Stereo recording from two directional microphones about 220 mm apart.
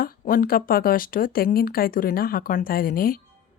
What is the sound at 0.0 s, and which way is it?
Speech, 40° left (ahead or behind).